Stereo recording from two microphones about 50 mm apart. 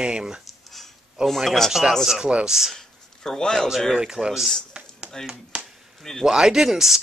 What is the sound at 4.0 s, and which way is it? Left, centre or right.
Speech, centre.